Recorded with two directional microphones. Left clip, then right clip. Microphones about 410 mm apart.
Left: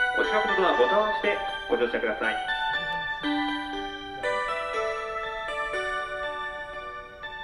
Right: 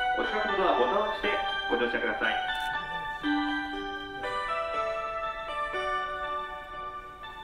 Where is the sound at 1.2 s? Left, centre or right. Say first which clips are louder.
Left 1 dB; centre.